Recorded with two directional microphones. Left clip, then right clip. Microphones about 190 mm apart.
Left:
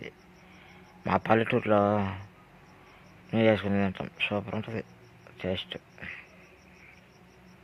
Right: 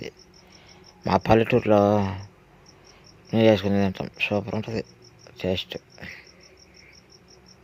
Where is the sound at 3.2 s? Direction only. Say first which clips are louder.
Right 6 dB; 30° right (ahead or behind).